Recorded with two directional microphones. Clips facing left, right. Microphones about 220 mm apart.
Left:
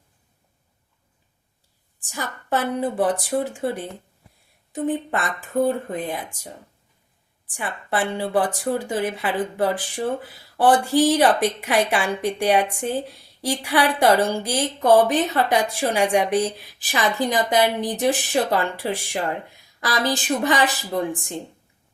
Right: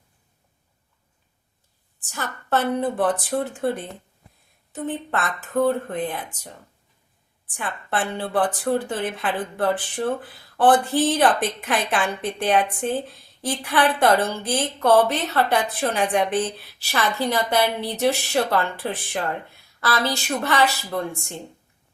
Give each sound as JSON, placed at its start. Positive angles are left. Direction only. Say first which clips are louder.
{"t": 2.0, "sound": "a woman's voice", "louder": "even", "side_deg": 10}
{"t": 4.7, "sound": "a woman's voice", "louder": "left 3 dB", "side_deg": 15}
{"t": 7.5, "sound": "a woman's voice", "louder": "left 1 dB", "side_deg": 10}